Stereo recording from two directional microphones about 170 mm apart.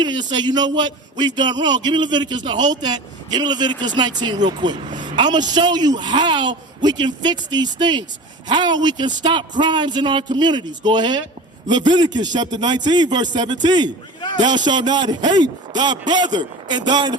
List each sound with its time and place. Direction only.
0.0 s a man's voice: 25° right (ahead or behind)